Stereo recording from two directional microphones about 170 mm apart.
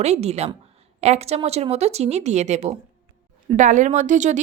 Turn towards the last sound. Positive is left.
turn(degrees=-45)  # may be behind; listen again after turning